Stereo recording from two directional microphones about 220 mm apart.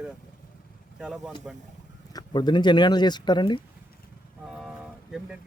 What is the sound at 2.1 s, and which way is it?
Speech, 20° left (ahead or behind).